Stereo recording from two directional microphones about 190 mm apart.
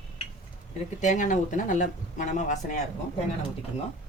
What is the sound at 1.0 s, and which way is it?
Speech, 40° left (ahead or behind).